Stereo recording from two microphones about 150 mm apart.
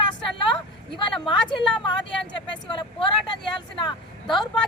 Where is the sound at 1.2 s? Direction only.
35° left (ahead or behind).